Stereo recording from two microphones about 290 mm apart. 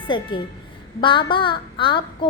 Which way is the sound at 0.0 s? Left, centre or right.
Centre.